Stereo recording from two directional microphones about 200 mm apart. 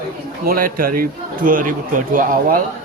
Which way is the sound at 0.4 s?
45° right (ahead or behind).